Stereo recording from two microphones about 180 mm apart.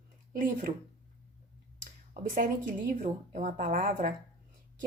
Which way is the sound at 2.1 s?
50° right (ahead or behind).